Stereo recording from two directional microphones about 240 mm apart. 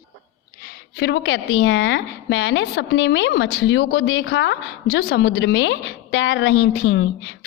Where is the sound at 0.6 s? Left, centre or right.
Left.